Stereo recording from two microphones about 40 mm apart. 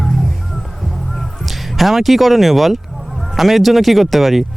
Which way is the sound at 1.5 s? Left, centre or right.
Centre.